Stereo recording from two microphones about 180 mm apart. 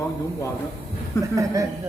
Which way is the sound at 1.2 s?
15° right (ahead or behind).